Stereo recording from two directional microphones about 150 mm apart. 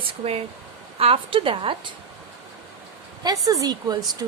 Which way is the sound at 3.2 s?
25° right (ahead or behind).